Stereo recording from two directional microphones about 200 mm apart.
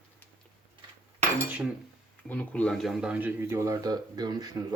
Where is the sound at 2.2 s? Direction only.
10° left (ahead or behind).